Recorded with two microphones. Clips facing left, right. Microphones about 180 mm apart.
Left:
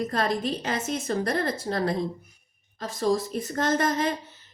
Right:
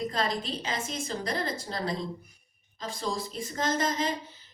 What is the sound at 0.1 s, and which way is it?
A woman's voice, 55° left (ahead or behind).